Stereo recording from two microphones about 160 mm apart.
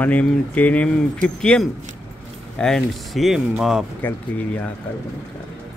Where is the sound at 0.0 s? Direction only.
10° left (ahead or behind).